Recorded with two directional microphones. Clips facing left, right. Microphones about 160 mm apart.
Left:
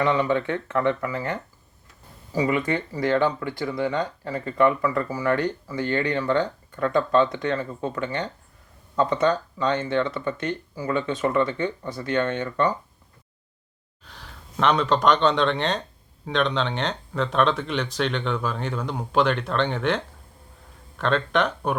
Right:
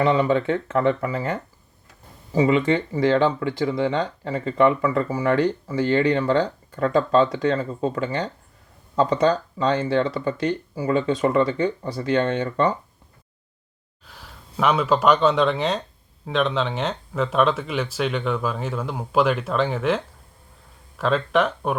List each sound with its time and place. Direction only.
0.0 s speech: 25° right (ahead or behind)
14.1 s speech: 5° right (ahead or behind)